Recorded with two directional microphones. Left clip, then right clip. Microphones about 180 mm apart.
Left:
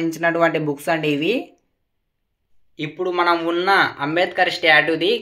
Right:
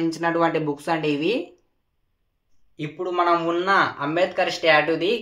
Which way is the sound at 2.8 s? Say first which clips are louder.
Left 2 dB; 30° left (ahead or behind).